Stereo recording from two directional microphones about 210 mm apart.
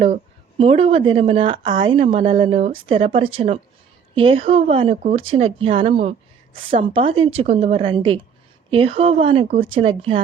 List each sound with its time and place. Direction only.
0.6 s a woman's voice: 30° right (ahead or behind)